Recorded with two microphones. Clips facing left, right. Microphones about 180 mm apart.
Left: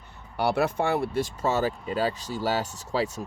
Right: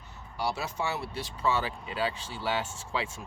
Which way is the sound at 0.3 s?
60° left (ahead or behind).